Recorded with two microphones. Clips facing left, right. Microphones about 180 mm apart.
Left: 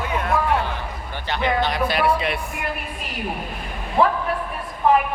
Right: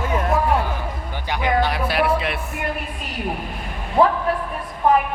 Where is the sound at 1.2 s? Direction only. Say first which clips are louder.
Right 1 dB; 10° right (ahead or behind).